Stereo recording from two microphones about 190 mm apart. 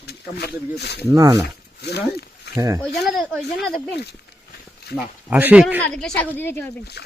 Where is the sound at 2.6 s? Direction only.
15° right (ahead or behind).